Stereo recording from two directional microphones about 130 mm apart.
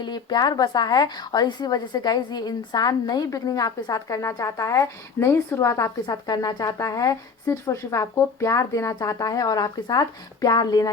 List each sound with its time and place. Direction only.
0.0 s a woman's voice: 35° left (ahead or behind)